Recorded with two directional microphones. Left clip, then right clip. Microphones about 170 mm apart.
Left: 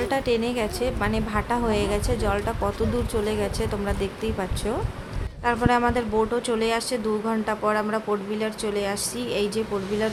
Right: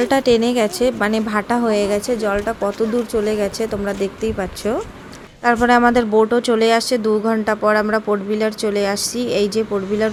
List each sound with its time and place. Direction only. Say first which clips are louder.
0.0 s speech: right 9 dB; 40° right (ahead or behind); by 4.8 s 25° right (ahead or behind)
5.5 s speech: right 8 dB; 35° right (ahead or behind)